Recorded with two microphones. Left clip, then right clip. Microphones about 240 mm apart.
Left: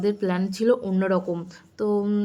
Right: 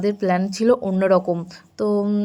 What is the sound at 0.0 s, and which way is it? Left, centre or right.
A woman's voice, centre.